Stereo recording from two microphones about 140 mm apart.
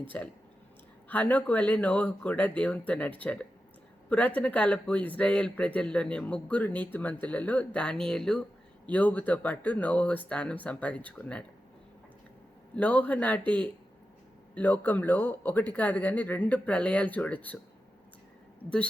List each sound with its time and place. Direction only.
0.1 s speech: 10° left (ahead or behind)
12.7 s speech: 10° left (ahead or behind)
14.5 s speech: 10° left (ahead or behind)